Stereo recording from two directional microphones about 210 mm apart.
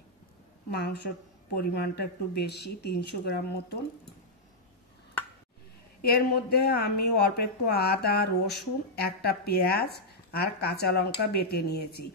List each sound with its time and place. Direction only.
0.7 s speech: 50° left (ahead or behind)
6.0 s speech: 50° left (ahead or behind)